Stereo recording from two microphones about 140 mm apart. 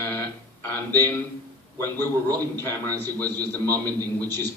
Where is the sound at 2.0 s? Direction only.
25° right (ahead or behind).